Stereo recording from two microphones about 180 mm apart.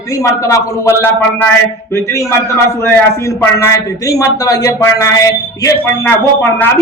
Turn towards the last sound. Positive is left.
turn(degrees=10)  # may be behind; listen again after turning